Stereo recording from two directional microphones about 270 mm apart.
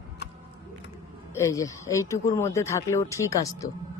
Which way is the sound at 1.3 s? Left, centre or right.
Centre.